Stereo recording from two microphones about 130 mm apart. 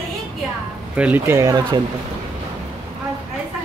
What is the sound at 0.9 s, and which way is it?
Speech, 10° right (ahead or behind).